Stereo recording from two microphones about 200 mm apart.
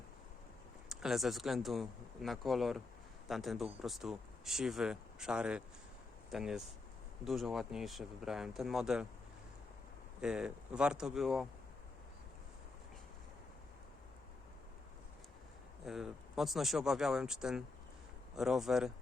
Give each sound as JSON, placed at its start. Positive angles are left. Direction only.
{"t": 0.9, "sound": "speech", "side_deg": 0}
{"t": 10.2, "sound": "speech", "side_deg": -5}
{"t": 15.9, "sound": "speech", "side_deg": 0}